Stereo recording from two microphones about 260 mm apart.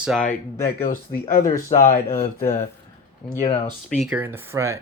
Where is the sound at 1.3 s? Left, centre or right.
Left.